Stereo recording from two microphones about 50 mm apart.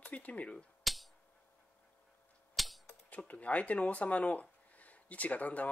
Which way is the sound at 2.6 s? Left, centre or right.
Centre.